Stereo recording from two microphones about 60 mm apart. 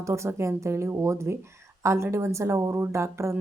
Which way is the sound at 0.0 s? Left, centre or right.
Right.